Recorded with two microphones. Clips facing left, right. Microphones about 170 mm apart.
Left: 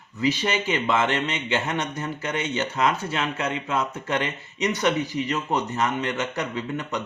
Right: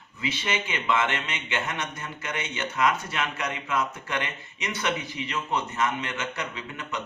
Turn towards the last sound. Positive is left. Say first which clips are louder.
# left 6 dB
turn(degrees=40)  # may be behind; listen again after turning